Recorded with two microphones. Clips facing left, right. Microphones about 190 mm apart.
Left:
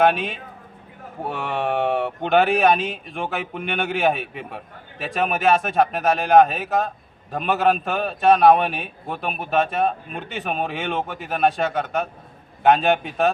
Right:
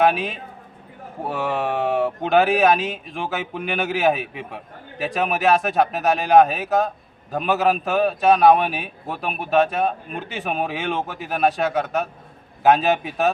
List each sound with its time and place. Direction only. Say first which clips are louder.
0.0 s speech: even; centre (ahead or behind)